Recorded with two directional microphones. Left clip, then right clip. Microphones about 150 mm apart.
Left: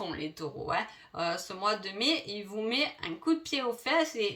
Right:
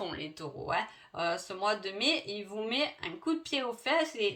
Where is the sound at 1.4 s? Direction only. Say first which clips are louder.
Left 1 dB; 30° right (ahead or behind).